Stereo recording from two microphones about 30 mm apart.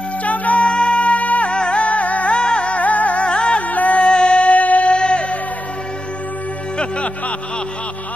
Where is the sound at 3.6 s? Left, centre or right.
Left.